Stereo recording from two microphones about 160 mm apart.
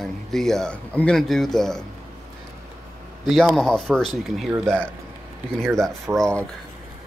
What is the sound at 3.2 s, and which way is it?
Speech, centre (ahead or behind).